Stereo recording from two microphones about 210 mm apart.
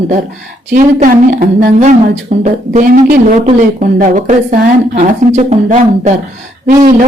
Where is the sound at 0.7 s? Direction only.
40° right (ahead or behind).